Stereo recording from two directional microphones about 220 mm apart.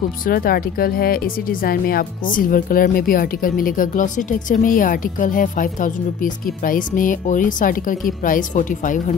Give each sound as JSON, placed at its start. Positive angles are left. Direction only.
{"t": 0.2, "sound": "speech", "side_deg": 40}